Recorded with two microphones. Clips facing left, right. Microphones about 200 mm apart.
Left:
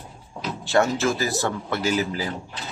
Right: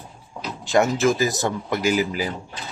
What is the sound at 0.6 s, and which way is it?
A man's voice, 15° right (ahead or behind).